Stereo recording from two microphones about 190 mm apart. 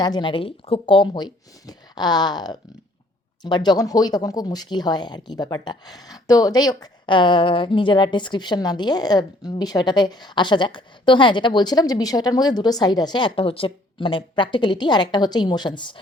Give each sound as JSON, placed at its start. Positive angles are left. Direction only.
{"t": 0.0, "sound": "speech", "side_deg": 25}